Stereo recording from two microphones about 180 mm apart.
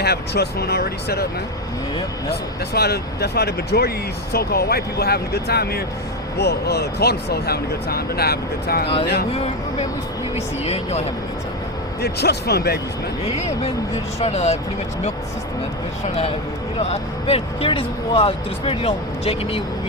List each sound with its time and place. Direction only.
0.0 s speech: 65° left (ahead or behind)
2.3 s speech: 65° left (ahead or behind)
9.3 s speech: 35° left (ahead or behind)
12.0 s speech: 65° left (ahead or behind)
14.2 s speech: 35° left (ahead or behind)
16.9 s speech: 35° left (ahead or behind)